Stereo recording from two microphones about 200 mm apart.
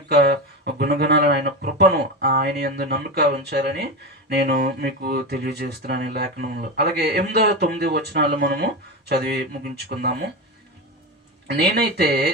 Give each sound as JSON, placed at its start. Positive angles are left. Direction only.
{"t": 0.1, "sound": "speech", "side_deg": -55}
{"t": 11.5, "sound": "speech", "side_deg": -55}